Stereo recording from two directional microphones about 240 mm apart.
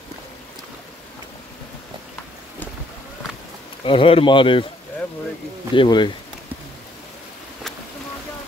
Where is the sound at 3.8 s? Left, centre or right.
Left.